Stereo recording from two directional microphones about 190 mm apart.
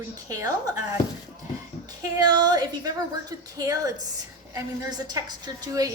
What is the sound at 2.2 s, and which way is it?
A woman's voice, 20° right (ahead or behind).